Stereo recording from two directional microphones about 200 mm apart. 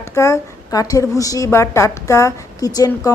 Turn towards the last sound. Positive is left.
turn(degrees=20)  # may be behind; listen again after turning